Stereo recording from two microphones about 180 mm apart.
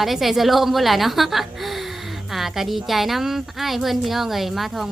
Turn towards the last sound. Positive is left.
turn(degrees=0)  # may be behind; listen again after turning